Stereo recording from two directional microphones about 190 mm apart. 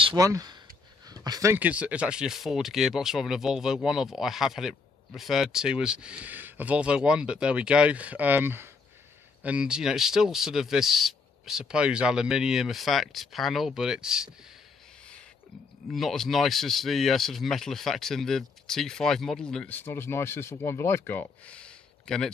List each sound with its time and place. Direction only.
0.0 s speech: 20° right (ahead or behind)
15.9 s speech: centre (ahead or behind)